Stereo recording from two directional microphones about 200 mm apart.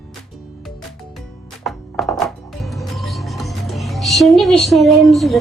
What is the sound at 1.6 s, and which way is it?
Music, centre (ahead or behind).